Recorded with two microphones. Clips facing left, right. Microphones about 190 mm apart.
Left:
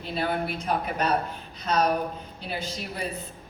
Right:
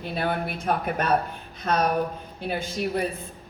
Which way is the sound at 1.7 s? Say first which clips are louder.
Right 1 dB; 55° right (ahead or behind).